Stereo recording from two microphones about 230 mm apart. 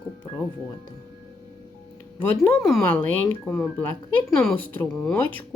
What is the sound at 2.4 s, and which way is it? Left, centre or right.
A child's voice, centre.